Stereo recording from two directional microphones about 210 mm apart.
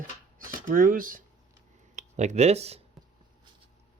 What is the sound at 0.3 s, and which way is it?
Speech, 40° right (ahead or behind).